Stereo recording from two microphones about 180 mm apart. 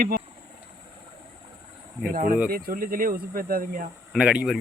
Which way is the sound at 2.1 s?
50° right (ahead or behind).